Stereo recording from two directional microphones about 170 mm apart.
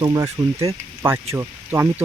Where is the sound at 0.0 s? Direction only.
25° right (ahead or behind).